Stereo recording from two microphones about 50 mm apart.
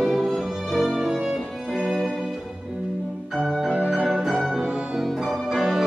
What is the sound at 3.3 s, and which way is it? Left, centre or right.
Music, centre.